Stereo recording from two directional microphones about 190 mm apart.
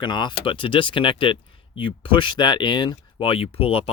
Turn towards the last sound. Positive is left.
turn(degrees=30)  # may be behind; listen again after turning